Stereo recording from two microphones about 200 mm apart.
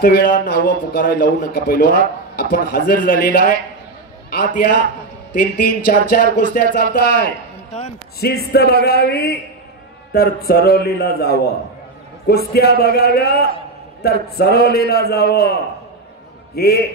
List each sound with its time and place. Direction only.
0.0 s a man's voice: 45° left (ahead or behind)
12.5 s a man's voice: 50° left (ahead or behind)
16.5 s a man's voice: 50° left (ahead or behind)